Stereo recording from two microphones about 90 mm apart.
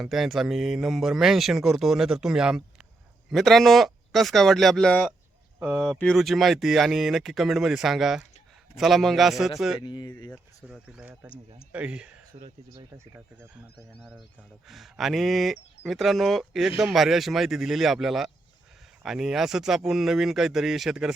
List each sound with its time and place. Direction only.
0.0 s speech: 5° right (ahead or behind)
9.8 s speech: 55° left (ahead or behind)
11.7 s speech: 15° right (ahead or behind)
14.7 s speech: centre (ahead or behind)